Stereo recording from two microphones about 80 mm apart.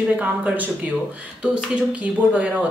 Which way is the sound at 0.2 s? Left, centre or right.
Centre.